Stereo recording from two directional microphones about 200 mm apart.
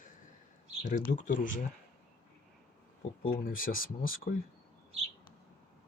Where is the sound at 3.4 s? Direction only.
45° left (ahead or behind).